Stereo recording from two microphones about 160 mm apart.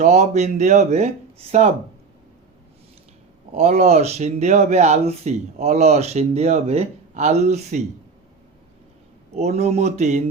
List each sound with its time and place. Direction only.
0.0 s speech: 45° right (ahead or behind)
3.5 s speech: 40° right (ahead or behind)
9.3 s speech: 45° right (ahead or behind)